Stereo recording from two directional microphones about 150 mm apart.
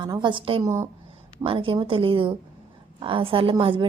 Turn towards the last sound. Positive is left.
turn(degrees=-35)  # may be behind; listen again after turning